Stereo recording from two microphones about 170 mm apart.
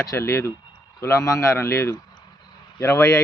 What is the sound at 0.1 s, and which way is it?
A man's voice, 15° left (ahead or behind).